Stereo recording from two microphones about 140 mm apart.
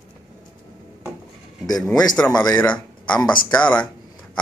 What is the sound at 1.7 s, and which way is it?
Speech, 5° left (ahead or behind).